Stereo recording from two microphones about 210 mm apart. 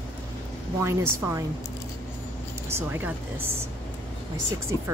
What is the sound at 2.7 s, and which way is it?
Speech, 10° right (ahead or behind).